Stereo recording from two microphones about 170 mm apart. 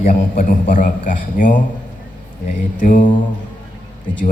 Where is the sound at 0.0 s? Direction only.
50° left (ahead or behind).